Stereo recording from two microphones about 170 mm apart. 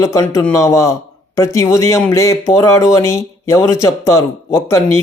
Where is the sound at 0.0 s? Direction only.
20° left (ahead or behind).